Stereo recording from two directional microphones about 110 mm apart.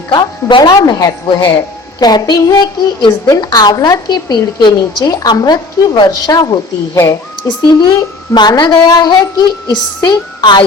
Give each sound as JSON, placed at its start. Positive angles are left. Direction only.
{"t": 0.1, "sound": "a woman's voice", "side_deg": 40}
{"t": 7.4, "sound": "a woman's voice", "side_deg": 45}